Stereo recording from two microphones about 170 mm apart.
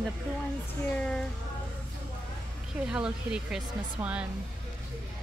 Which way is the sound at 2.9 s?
5° right (ahead or behind).